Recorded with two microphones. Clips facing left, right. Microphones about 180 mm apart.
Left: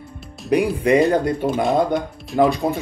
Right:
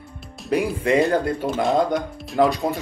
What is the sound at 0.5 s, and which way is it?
Speech, 15° left (ahead or behind).